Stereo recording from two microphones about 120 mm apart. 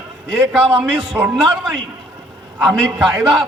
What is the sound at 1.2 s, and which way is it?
Speech, 20° right (ahead or behind).